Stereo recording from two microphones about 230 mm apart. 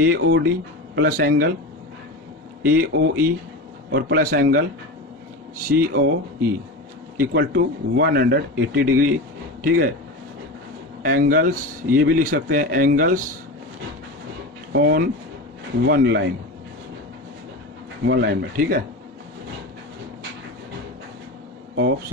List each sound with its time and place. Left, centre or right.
0.0 s a man's voice: right
2.6 s a man's voice: right
7.2 s speech: right
11.0 s a man's voice: right
14.7 s speech: right
18.0 s speech: right